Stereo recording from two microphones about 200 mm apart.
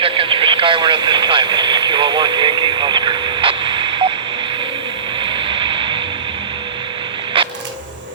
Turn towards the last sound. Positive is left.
turn(degrees=-25)  # may be behind; listen again after turning